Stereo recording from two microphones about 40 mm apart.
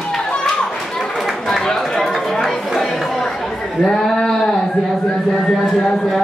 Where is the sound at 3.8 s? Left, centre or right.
Centre.